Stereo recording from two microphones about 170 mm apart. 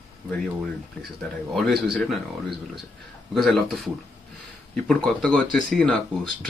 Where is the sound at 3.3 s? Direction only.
Centre (ahead or behind).